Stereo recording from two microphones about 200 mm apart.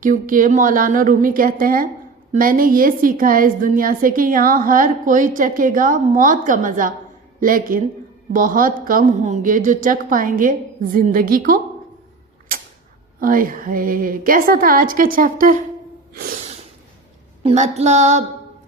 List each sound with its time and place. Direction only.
0.0 s a woman's voice: 40° right (ahead or behind)
13.1 s a woman's voice: 45° right (ahead or behind)
17.4 s female singing: 35° right (ahead or behind)